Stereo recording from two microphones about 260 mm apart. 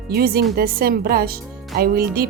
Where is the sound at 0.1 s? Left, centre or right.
Right.